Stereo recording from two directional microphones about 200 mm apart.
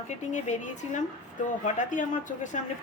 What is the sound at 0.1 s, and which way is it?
Speech, 35° left (ahead or behind).